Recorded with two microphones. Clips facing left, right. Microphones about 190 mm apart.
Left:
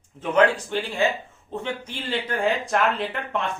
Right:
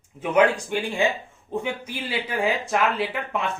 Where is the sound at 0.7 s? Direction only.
15° right (ahead or behind).